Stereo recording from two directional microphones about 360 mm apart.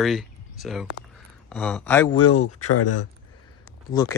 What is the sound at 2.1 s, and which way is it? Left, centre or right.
Speech, left.